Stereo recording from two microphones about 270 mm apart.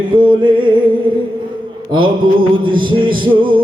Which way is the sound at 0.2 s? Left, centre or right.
Centre.